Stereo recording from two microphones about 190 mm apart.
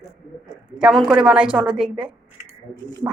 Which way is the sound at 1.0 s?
5° right (ahead or behind).